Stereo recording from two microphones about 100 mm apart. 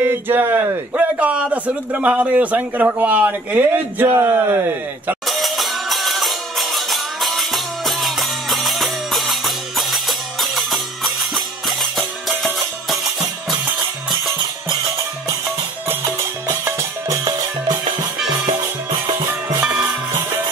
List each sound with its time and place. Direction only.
0.0 s speech: 20° right (ahead or behind)
5.3 s music: centre (ahead or behind)
16.6 s music: 35° right (ahead or behind)
18.5 s music: 60° right (ahead or behind)
19.6 s music: 10° right (ahead or behind)